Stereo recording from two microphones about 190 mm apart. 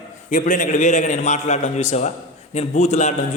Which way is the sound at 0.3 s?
40° left (ahead or behind).